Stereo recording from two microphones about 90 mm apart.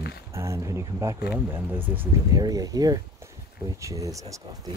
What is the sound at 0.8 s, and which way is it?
Speech, 40° right (ahead or behind).